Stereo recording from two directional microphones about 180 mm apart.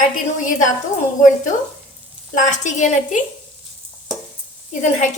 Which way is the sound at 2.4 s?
45° left (ahead or behind).